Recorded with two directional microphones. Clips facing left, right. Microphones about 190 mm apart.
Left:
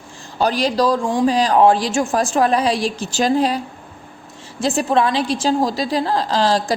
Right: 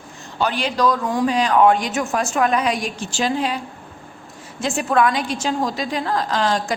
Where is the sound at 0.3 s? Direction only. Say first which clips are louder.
Left 4 dB; 40° left (ahead or behind).